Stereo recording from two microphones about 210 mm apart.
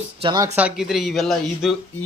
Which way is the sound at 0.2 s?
20° right (ahead or behind).